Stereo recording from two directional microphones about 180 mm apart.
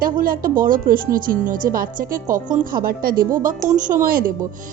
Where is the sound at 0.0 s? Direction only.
55° right (ahead or behind).